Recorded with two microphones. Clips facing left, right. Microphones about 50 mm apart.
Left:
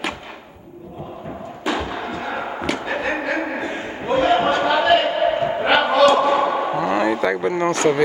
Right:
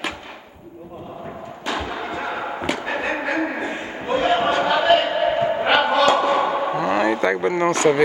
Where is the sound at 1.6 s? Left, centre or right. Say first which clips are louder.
Left 3 dB; centre.